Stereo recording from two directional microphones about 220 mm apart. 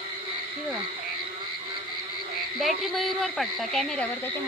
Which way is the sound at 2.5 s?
Centre (ahead or behind).